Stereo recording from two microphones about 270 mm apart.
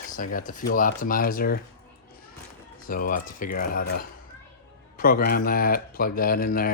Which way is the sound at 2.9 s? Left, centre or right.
Left.